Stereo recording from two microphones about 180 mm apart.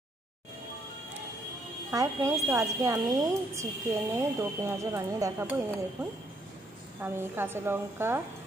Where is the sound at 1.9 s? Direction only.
15° right (ahead or behind).